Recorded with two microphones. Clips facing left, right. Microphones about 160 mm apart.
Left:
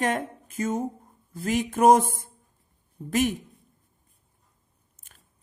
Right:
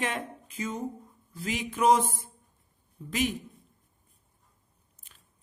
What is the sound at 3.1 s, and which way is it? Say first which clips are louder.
Speech: left 5 dB; 50° left (ahead or behind).